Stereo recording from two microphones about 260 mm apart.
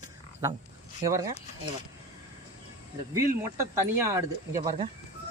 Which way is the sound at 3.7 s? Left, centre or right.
Centre.